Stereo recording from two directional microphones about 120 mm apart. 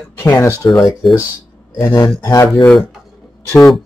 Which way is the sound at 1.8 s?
25° left (ahead or behind).